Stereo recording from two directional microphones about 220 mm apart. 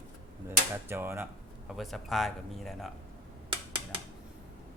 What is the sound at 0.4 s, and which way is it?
Speech, 10° right (ahead or behind).